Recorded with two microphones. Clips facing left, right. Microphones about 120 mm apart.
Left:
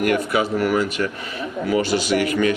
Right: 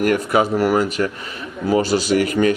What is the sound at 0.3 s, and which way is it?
A man's voice, 40° right (ahead or behind).